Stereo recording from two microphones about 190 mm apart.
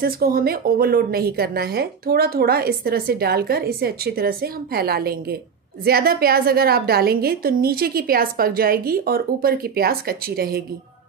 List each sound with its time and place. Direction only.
0.0 s speech: 50° right (ahead or behind)